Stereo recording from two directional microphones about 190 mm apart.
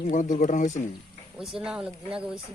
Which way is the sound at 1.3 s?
5° right (ahead or behind).